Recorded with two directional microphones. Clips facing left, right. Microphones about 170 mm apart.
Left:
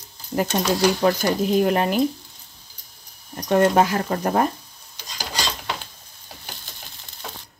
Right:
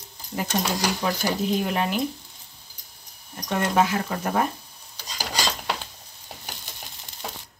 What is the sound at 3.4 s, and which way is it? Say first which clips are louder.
Speech: left 6 dB; 40° left (ahead or behind).